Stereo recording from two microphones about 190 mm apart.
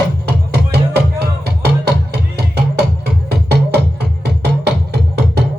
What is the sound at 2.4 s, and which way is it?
Music, 60° right (ahead or behind).